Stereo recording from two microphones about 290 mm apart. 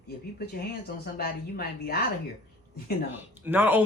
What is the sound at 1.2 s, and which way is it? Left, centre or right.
Speech, left.